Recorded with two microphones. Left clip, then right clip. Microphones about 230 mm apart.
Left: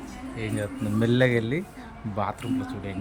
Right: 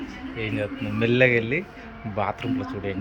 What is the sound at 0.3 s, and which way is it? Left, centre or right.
Speech, centre.